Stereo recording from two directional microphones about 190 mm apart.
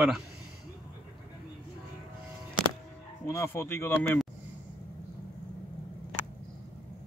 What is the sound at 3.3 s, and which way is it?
Speech, 15° left (ahead or behind).